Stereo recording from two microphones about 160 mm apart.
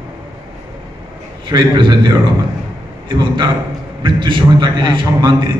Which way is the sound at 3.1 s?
30° right (ahead or behind).